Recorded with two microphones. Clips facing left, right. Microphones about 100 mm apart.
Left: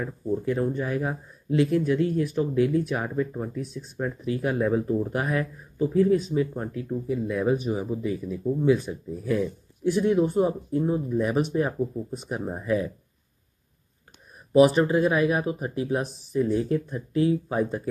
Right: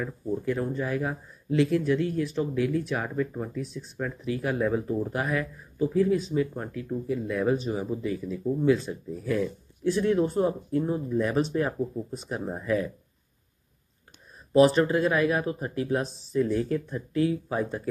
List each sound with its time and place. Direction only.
0.0 s speech: 15° left (ahead or behind)
4.8 s speech: 5° left (ahead or behind)
5.1 s speech: 25° left (ahead or behind)
6.3 s speech: 15° left (ahead or behind)
14.5 s speech: 15° left (ahead or behind)